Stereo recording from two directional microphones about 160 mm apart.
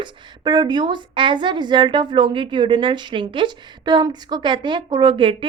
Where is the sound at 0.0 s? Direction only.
30° right (ahead or behind).